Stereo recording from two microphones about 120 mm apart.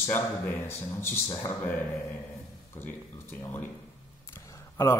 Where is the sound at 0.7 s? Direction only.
20° left (ahead or behind).